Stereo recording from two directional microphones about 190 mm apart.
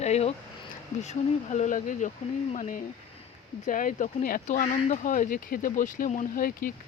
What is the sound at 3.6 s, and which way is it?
Speech, 45° left (ahead or behind).